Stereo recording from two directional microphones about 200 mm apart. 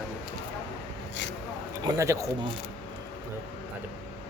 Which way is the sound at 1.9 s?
15° right (ahead or behind).